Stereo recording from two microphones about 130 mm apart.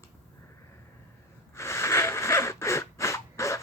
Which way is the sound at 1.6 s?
20° left (ahead or behind).